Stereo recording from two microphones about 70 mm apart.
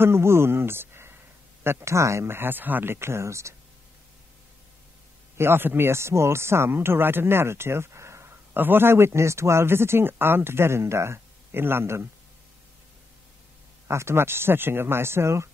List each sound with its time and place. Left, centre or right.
0.0 s speech: right
5.4 s speech: right
13.8 s speech: right